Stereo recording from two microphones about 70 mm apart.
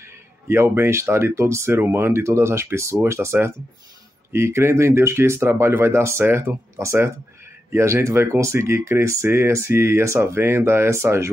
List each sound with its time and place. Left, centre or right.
0.0 s speech: right